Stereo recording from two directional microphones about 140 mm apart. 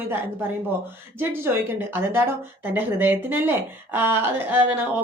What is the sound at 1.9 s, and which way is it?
A woman's voice, 15° right (ahead or behind).